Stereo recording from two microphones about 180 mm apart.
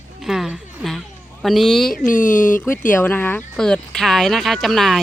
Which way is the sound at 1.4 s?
Centre (ahead or behind).